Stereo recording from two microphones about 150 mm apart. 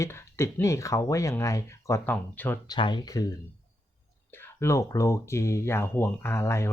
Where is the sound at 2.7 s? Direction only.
30° left (ahead or behind).